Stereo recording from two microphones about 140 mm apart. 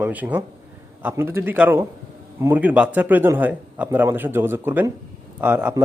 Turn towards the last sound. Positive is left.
turn(degrees=-10)  # may be behind; listen again after turning